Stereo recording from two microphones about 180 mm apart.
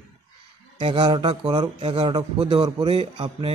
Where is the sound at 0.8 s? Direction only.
25° right (ahead or behind).